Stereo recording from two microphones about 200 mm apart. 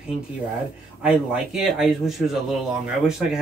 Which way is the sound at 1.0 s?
5° right (ahead or behind).